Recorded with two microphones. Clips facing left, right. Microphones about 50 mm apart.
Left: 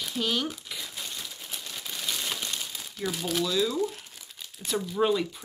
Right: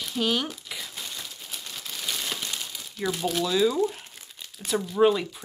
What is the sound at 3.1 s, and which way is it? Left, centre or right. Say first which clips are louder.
Speech: right 3 dB; right.